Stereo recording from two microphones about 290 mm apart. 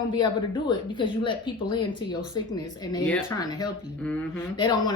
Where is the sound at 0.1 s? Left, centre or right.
Centre.